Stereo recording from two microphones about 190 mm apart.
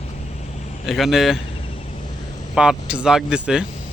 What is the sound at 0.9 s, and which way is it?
Speech, centre (ahead or behind).